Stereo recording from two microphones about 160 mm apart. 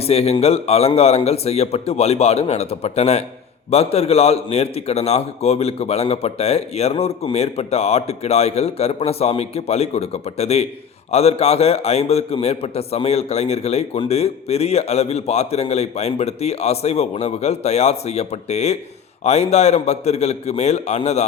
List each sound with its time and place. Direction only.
0.0 s a man's voice: 40° left (ahead or behind)